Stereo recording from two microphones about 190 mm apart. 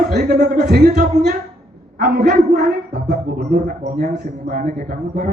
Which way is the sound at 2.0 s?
55° right (ahead or behind).